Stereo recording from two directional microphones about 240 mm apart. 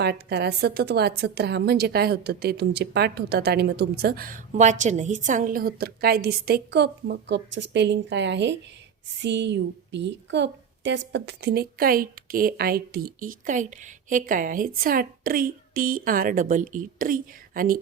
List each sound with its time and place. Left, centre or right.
0.0 s a woman's voice: right